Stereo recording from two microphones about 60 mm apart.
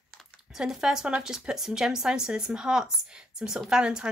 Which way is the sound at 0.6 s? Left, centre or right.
Centre.